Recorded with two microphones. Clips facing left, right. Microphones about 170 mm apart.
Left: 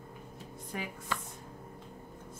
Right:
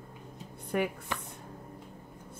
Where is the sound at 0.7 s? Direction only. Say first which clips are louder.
Right 10 dB; 65° right (ahead or behind).